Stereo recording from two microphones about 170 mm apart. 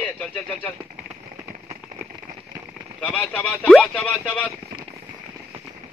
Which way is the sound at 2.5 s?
55° right (ahead or behind).